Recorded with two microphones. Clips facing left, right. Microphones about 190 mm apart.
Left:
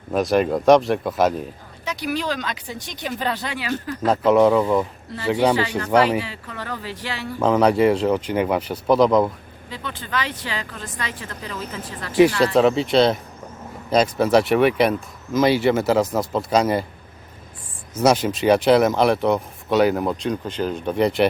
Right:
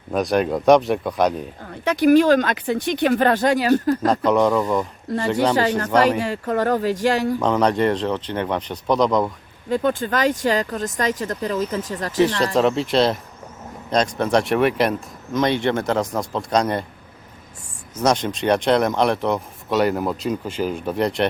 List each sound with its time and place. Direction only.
0.1 s speech: centre (ahead or behind)
1.8 s speech: 55° right (ahead or behind)
4.0 s speech: 5° left (ahead or behind)
6.1 s speech: 45° right (ahead or behind)
7.3 s speech: 5° left (ahead or behind)
9.6 s speech: 45° right (ahead or behind)
12.5 s speech: centre (ahead or behind)
17.9 s speech: 5° left (ahead or behind)